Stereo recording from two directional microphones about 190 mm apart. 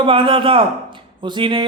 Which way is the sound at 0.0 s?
25° right (ahead or behind).